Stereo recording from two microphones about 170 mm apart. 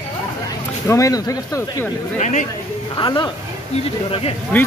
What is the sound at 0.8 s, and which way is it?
Speech, 20° left (ahead or behind).